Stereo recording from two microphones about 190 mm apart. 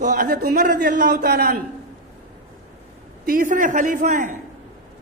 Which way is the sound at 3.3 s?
45° right (ahead or behind).